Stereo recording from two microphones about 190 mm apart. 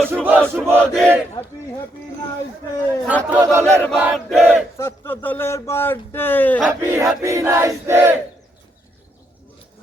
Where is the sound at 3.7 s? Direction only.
5° left (ahead or behind).